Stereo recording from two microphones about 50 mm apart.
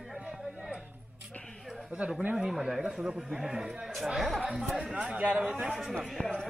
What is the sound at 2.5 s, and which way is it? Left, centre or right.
A man's voice, centre.